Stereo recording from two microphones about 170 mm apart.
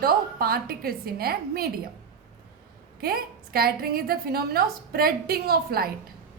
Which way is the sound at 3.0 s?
60° right (ahead or behind).